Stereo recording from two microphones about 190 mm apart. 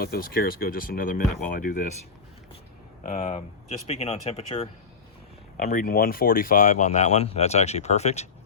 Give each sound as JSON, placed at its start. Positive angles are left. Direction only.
{"t": 0.0, "sound": "speech", "side_deg": 50}
{"t": 3.0, "sound": "speech", "side_deg": 45}
{"t": 5.5, "sound": "speech", "side_deg": 50}